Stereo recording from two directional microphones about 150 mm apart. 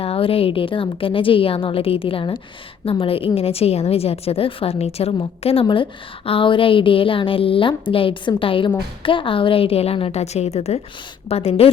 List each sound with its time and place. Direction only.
0.0 s a woman's voice: 40° left (ahead or behind)